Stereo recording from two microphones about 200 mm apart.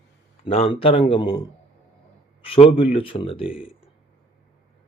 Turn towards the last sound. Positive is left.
turn(degrees=30)  # may be behind; listen again after turning